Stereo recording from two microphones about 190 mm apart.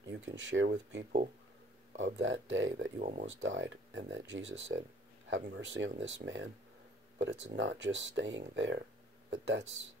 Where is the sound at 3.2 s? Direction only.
75° right (ahead or behind).